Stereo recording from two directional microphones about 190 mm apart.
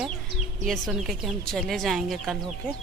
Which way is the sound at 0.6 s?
Centre (ahead or behind).